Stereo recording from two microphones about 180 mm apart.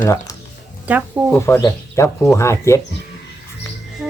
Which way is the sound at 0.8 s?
10° right (ahead or behind).